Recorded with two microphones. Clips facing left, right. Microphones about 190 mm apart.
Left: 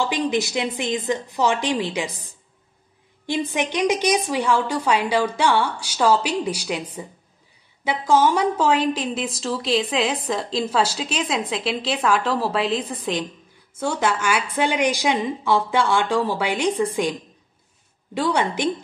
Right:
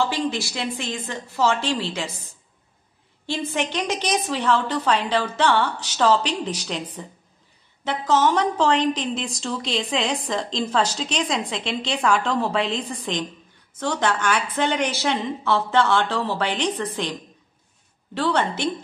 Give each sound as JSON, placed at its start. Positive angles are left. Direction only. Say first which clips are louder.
{"t": 0.0, "sound": "a woman's voice", "louder": "left 2 dB", "side_deg": 15}
{"t": 18.1, "sound": "a woman's voice", "louder": "left 1 dB", "side_deg": 10}